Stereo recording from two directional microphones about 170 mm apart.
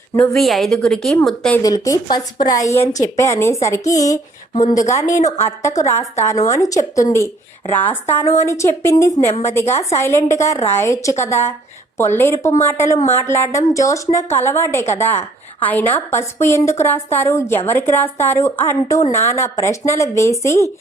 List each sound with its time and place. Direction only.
0.2 s a woman's voice: centre (ahead or behind)
1.6 s a woman's voice: 20° left (ahead or behind)